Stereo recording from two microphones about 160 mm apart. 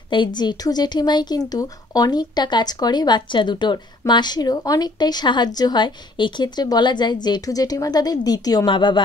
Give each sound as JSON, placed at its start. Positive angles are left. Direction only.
{"t": 0.1, "sound": "speech", "side_deg": 30}